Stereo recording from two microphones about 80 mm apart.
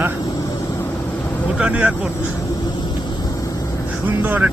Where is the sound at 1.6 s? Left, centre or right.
Centre.